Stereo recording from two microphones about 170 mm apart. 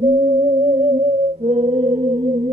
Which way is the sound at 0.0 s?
40° right (ahead or behind).